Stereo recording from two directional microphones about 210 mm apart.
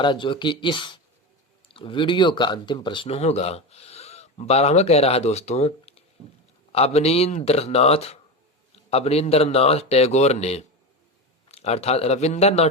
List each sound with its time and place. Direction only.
0.0 s speech: 25° left (ahead or behind)